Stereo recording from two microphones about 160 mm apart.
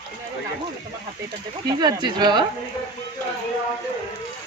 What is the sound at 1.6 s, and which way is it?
Speech, 25° right (ahead or behind).